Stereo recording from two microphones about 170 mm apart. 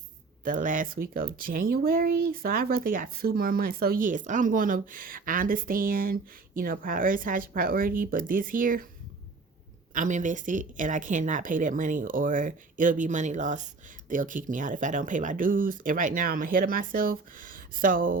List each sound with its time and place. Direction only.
0.4 s speech: 50° right (ahead or behind)
9.9 s speech: 50° right (ahead or behind)